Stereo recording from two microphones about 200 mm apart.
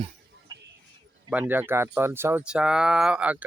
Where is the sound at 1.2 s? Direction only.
10° right (ahead or behind).